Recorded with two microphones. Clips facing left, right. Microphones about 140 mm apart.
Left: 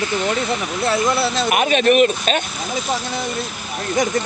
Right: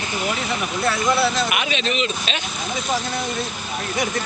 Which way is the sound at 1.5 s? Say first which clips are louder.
Left 9 dB; 45° left (ahead or behind).